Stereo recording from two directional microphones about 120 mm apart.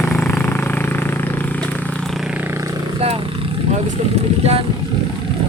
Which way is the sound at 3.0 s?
50° right (ahead or behind).